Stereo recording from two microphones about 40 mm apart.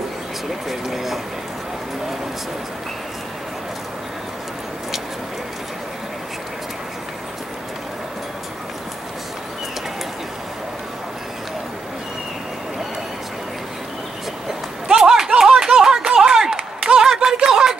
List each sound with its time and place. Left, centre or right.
0.7 s speech: centre
14.9 s clapping: centre
16.1 s a sound: centre